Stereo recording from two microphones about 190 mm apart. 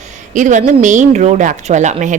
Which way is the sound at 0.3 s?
40° right (ahead or behind).